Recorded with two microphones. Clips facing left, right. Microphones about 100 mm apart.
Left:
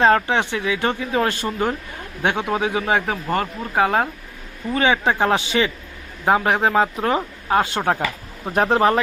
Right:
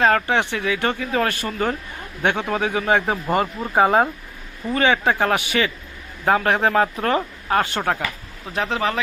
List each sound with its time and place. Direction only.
0.0 s speech: 20° left (ahead or behind)
3.1 s speech: 5° right (ahead or behind)
4.7 s speech: 15° left (ahead or behind)
8.5 s speech: 45° left (ahead or behind)